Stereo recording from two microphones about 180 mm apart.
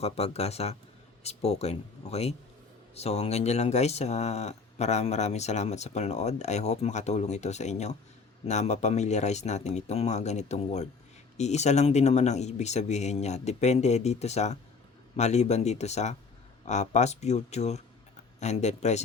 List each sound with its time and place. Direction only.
0.0 s speech: 35° left (ahead or behind)